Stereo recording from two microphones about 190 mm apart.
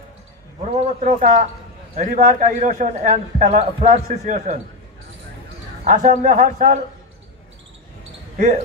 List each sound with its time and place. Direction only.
0.6 s a man's voice: 35° right (ahead or behind)
5.9 s a man's voice: 40° right (ahead or behind)